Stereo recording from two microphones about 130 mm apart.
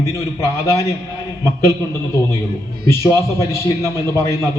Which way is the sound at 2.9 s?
20° left (ahead or behind).